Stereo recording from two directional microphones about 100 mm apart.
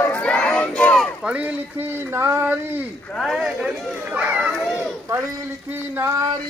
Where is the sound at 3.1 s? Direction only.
Centre (ahead or behind).